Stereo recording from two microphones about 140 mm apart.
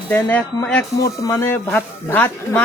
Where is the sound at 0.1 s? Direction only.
15° left (ahead or behind).